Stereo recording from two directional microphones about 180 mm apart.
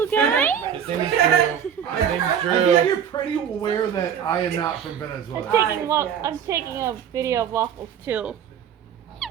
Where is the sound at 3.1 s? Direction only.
20° left (ahead or behind).